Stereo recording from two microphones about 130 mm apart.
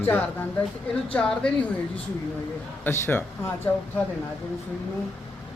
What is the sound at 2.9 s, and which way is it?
Speech, 20° left (ahead or behind).